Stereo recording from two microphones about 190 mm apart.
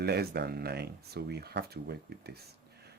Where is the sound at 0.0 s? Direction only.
55° right (ahead or behind).